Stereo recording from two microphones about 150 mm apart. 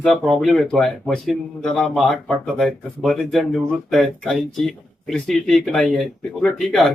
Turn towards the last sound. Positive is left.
turn(degrees=5)  # may be behind; listen again after turning